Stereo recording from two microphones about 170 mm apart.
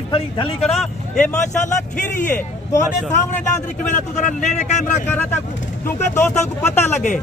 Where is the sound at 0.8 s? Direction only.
5° left (ahead or behind).